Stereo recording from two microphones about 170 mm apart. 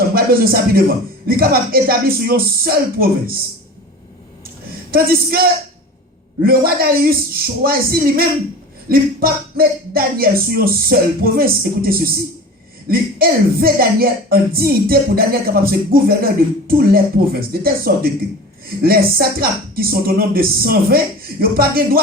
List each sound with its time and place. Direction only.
0.1 s speech: 60° right (ahead or behind)
4.9 s speech: 60° right (ahead or behind)